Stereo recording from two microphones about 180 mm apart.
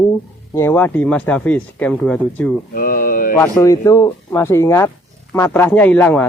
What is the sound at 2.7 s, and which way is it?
Speech, 55° left (ahead or behind).